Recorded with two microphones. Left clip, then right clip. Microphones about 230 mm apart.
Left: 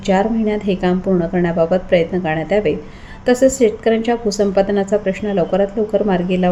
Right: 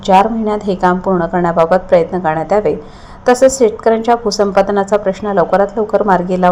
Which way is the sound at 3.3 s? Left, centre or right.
Centre.